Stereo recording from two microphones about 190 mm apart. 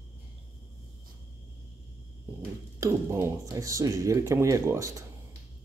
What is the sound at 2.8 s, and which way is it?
Speech, 15° right (ahead or behind).